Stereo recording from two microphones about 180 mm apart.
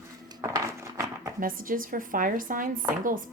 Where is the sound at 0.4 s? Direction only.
15° right (ahead or behind).